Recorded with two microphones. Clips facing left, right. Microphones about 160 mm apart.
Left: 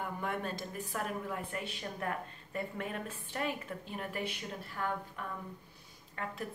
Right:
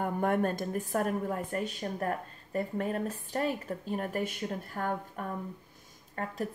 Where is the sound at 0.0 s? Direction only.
50° right (ahead or behind).